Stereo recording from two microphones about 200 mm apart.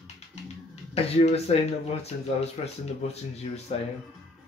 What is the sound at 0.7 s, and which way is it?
Speech, 30° left (ahead or behind).